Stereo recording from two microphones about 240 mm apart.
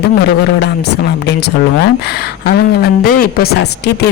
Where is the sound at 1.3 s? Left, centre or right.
Left.